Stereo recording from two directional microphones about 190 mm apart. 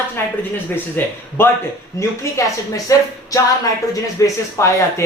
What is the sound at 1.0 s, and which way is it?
Speech, 10° left (ahead or behind).